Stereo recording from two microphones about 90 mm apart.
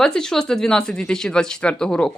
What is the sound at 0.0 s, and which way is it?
A man's voice, 5° left (ahead or behind).